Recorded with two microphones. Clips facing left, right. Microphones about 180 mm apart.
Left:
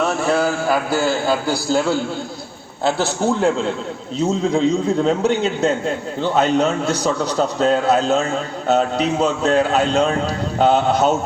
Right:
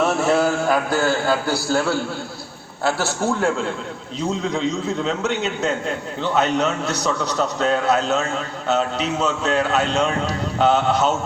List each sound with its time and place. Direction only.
0.0 s a man's voice: centre (ahead or behind); by 10.2 s 30° left (ahead or behind)